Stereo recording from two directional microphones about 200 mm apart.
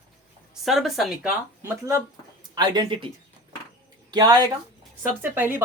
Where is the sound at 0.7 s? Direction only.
Centre (ahead or behind); by 3.0 s 25° right (ahead or behind).